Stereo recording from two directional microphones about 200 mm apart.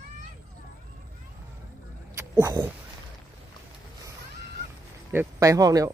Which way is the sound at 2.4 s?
15° right (ahead or behind).